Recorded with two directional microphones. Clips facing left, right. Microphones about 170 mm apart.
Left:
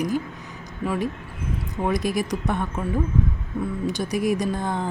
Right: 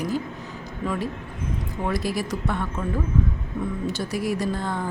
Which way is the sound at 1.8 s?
20° left (ahead or behind).